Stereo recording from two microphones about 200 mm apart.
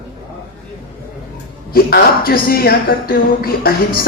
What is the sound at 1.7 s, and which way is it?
A woman's voice, 45° left (ahead or behind).